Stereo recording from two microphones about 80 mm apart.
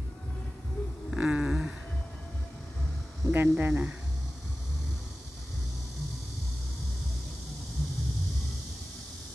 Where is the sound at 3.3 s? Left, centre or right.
Right.